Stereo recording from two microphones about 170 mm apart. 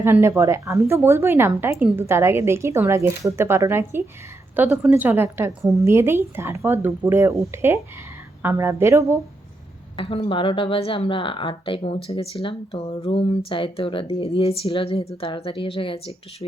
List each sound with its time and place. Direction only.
0.0 s speech: 15° right (ahead or behind)
10.0 s speech: 30° left (ahead or behind)